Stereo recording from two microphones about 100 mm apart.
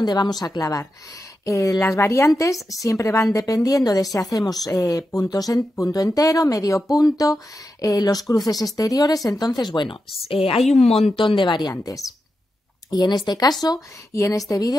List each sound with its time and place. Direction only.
0.0 s a woman's voice: 45° left (ahead or behind)
10.2 s a woman's voice: 70° left (ahead or behind)
10.9 s speech: 90° left
11.1 s speech: 55° left (ahead or behind)
12.9 s a woman's voice: 45° left (ahead or behind)